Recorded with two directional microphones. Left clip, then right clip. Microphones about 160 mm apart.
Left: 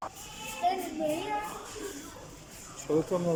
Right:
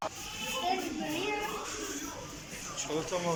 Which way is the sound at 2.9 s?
60° left (ahead or behind).